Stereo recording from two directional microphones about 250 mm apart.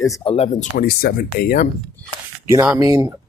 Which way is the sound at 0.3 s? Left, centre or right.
Left.